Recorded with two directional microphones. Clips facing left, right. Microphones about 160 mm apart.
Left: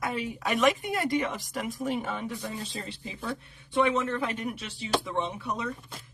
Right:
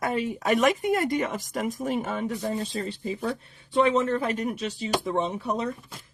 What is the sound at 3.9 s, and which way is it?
Speech, 40° right (ahead or behind).